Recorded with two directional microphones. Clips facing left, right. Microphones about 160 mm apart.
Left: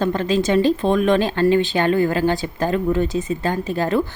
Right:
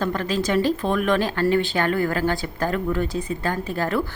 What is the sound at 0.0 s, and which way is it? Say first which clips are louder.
Speech: left 5 dB; 25° left (ahead or behind).